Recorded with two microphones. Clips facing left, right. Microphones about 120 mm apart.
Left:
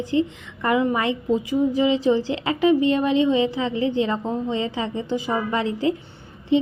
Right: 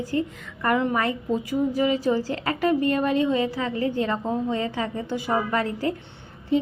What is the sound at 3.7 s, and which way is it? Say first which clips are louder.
Speech: left 3 dB; 50° right (ahead or behind).